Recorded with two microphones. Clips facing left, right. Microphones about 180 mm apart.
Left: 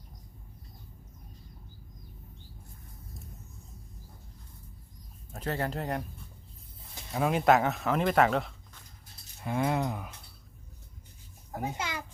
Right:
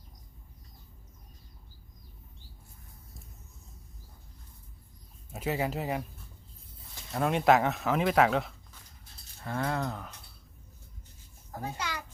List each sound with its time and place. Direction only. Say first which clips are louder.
5.3 s speech: right 1 dB; 10° right (ahead or behind)
9.4 s speech: left 3 dB; 15° left (ahead or behind)
11.5 s a sound: left 2 dB; 20° left (ahead or behind)